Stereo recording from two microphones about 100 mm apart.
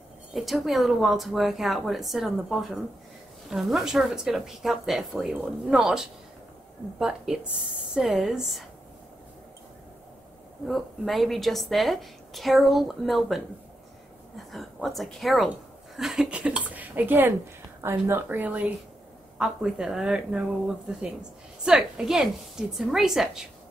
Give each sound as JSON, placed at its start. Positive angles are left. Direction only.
{"t": 0.3, "sound": "speech", "side_deg": 0}
{"t": 10.7, "sound": "speech", "side_deg": 0}
{"t": 14.5, "sound": "speech", "side_deg": 0}